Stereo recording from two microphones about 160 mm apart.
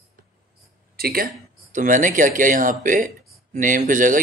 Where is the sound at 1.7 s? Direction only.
55° right (ahead or behind).